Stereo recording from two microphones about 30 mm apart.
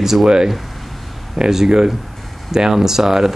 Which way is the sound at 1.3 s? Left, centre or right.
Centre.